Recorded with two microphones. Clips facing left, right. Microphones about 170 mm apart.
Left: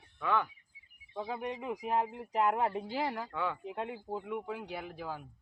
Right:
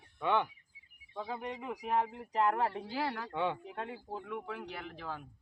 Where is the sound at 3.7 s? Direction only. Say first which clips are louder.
Left 3 dB; 15° left (ahead or behind).